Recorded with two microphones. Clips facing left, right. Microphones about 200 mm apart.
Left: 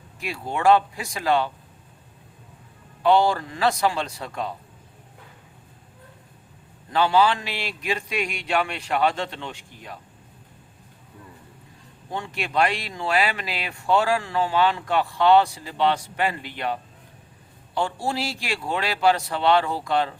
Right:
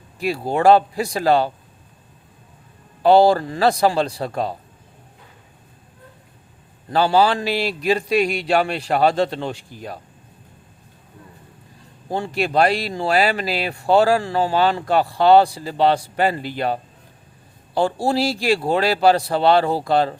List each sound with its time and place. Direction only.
0.2 s speech: 35° right (ahead or behind)
3.0 s speech: 35° right (ahead or behind)
6.9 s speech: 35° right (ahead or behind)
12.0 s speech: 35° right (ahead or behind)